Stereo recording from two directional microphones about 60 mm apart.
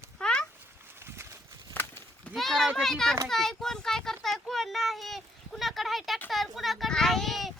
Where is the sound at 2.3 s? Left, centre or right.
Centre.